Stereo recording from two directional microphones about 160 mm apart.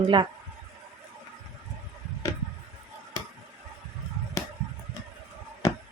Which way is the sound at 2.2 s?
20° left (ahead or behind).